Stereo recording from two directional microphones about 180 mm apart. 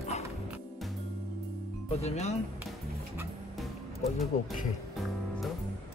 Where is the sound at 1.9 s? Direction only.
35° left (ahead or behind).